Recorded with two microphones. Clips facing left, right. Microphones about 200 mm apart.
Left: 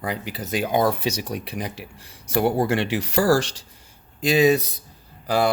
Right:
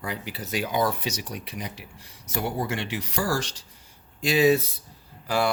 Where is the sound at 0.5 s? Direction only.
55° left (ahead or behind).